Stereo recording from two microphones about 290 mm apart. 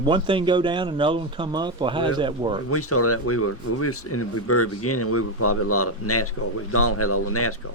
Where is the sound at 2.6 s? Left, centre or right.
Left.